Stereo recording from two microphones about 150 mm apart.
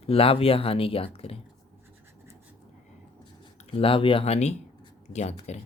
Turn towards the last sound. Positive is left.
turn(degrees=50)  # may be behind; listen again after turning